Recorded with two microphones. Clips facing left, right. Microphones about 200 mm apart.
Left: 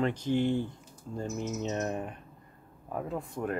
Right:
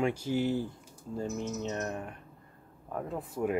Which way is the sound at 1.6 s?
20° left (ahead or behind).